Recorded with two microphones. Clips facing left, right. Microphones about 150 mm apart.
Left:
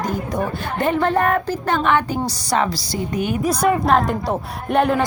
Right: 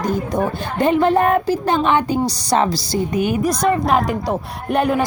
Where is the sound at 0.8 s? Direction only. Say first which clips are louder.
Right 3 dB; 20° right (ahead or behind).